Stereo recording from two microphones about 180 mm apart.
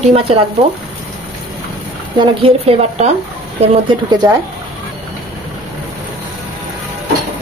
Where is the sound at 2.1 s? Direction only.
35° right (ahead or behind).